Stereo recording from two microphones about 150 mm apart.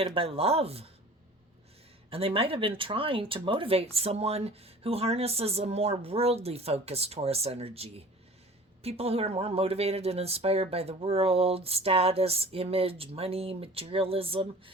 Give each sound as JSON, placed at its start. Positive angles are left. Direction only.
{"t": 0.0, "sound": "speech", "side_deg": -40}
{"t": 2.0, "sound": "speech", "side_deg": -40}